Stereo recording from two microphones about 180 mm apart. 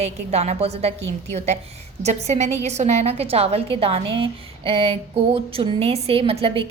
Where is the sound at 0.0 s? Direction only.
35° right (ahead or behind).